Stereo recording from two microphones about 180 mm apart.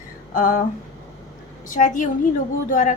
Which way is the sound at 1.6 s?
45° left (ahead or behind).